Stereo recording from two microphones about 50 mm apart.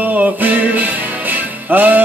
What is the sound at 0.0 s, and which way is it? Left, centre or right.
Music, right.